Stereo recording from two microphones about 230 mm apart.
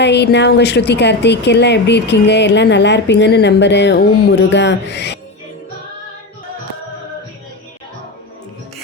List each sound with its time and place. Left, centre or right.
0.0 s a woman's voice: left